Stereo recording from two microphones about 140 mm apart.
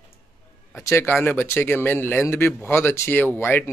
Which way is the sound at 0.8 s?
20° left (ahead or behind).